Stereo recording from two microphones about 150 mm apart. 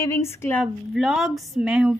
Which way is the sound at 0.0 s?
20° left (ahead or behind).